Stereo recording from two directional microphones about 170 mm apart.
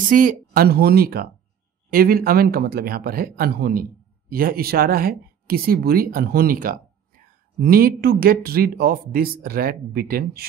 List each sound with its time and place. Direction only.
0.0 s speech: 50° right (ahead or behind)